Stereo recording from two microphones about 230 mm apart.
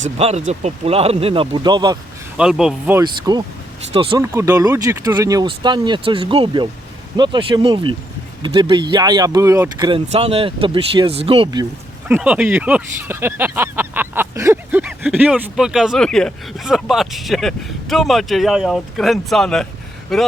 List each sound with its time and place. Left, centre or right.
0.2 s speech: right
2.4 s speech: centre
3.0 s speech: centre
12.0 s speech: centre